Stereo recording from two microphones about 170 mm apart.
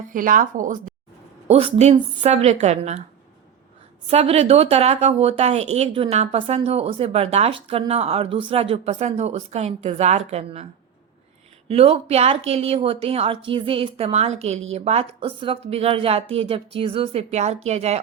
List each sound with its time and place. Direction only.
0.1 s speech: 55° right (ahead or behind)
1.5 s a woman's voice: 35° right (ahead or behind)
4.1 s a woman's voice: 40° right (ahead or behind)
11.7 s a woman's voice: 35° right (ahead or behind)